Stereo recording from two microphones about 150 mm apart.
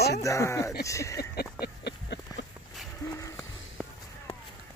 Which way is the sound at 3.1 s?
20° left (ahead or behind).